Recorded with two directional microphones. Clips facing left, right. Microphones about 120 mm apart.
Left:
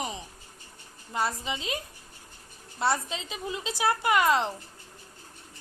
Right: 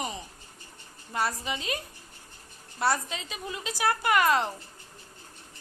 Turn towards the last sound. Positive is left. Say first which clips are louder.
# even
turn(degrees=20)  # may be behind; listen again after turning